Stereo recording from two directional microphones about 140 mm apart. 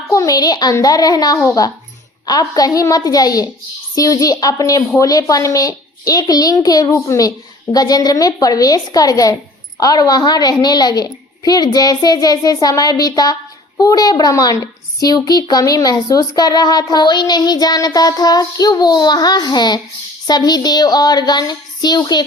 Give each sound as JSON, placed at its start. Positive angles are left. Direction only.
{"t": 0.1, "sound": "a child's voice", "side_deg": 25}